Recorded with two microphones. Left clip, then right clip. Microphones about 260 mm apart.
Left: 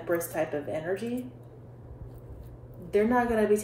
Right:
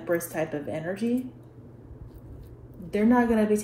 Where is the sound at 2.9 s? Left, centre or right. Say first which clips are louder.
Right 1 dB; right.